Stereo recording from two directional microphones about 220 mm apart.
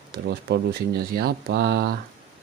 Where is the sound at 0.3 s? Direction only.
50° right (ahead or behind).